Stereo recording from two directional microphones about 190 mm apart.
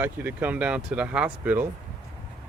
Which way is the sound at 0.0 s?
10° right (ahead or behind).